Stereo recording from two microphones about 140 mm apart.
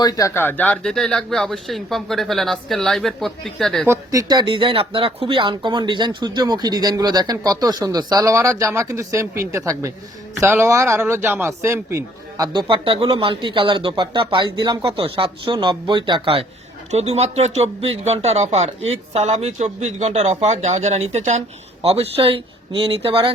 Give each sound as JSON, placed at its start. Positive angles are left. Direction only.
{"t": 0.0, "sound": "speech", "side_deg": 20}
{"t": 3.8, "sound": "speech", "side_deg": -25}
{"t": 12.6, "sound": "speech", "side_deg": -40}
{"t": 16.9, "sound": "a man's voice", "side_deg": -50}